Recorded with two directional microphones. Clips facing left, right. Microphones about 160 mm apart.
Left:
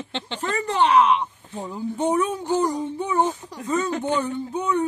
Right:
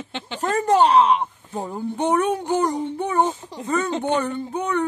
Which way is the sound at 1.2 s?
55° right (ahead or behind).